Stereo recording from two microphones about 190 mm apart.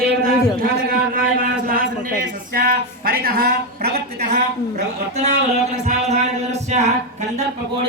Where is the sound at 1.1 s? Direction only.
50° right (ahead or behind).